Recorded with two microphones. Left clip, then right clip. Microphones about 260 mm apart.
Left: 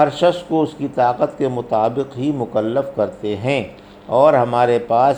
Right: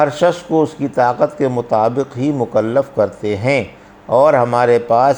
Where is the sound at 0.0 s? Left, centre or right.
Right.